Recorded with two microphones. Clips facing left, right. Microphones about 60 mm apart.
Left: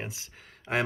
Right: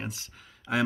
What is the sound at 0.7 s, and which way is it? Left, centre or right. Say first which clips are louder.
Speech: even; left.